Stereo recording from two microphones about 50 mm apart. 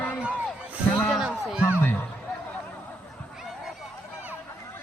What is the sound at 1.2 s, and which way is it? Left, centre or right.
Music, centre.